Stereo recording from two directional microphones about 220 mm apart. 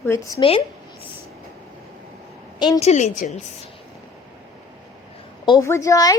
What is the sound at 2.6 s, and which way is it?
Speech, 20° left (ahead or behind).